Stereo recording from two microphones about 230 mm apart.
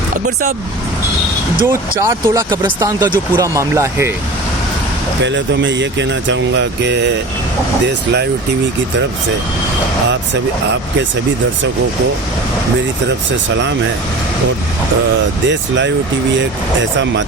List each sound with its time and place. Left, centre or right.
1.6 s speech: centre
5.2 s speech: right
15.4 s speech: right